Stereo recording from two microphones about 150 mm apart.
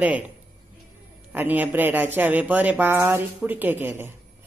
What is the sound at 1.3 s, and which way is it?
Speech, 10° right (ahead or behind).